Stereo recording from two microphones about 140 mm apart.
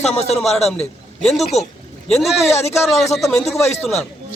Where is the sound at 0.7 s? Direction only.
5° left (ahead or behind).